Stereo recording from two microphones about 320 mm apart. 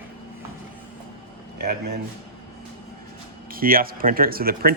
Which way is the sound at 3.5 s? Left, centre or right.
Right.